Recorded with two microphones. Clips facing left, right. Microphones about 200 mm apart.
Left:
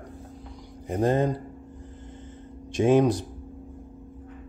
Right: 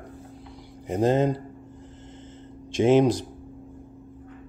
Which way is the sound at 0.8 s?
25° right (ahead or behind).